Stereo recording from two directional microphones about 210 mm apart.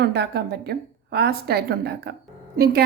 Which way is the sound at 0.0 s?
50° right (ahead or behind).